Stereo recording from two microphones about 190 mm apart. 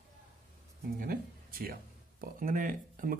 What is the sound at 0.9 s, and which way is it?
Speech, 50° right (ahead or behind).